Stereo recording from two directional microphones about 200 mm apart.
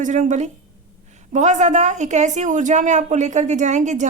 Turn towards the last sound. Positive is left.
turn(degrees=-35)  # may be behind; listen again after turning